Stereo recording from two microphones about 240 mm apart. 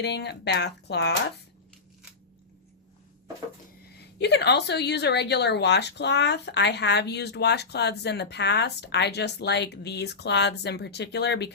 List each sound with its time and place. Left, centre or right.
0.0 s a woman's voice: left
3.9 s a woman's voice: left